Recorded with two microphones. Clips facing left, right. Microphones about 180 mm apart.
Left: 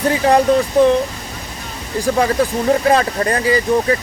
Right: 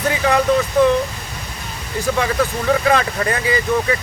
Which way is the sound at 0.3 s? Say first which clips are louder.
Left 3 dB; 30° left (ahead or behind).